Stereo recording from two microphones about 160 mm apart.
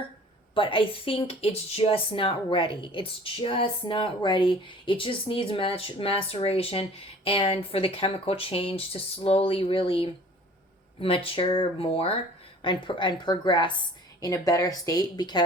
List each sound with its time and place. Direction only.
0.5 s speech: 30° left (ahead or behind)